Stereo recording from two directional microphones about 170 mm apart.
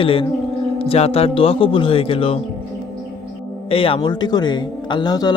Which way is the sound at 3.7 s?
35° left (ahead or behind).